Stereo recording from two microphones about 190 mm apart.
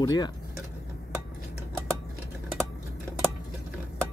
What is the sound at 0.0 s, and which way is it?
Speech, 20° left (ahead or behind).